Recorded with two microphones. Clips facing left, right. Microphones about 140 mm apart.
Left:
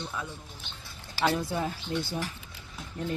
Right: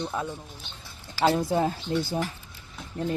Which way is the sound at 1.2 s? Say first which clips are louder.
Right 4 dB; 25° right (ahead or behind).